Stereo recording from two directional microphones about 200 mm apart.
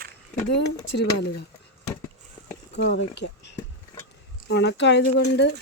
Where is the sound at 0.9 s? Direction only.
60° left (ahead or behind).